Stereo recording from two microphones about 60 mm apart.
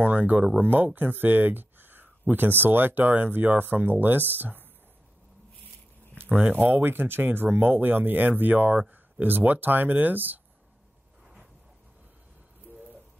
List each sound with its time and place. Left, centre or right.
0.0 s speech: right
6.1 s speech: right